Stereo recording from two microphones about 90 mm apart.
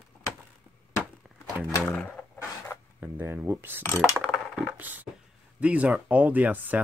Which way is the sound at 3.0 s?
20° right (ahead or behind).